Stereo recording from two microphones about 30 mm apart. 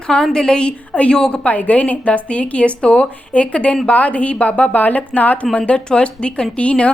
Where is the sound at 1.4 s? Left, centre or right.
Left.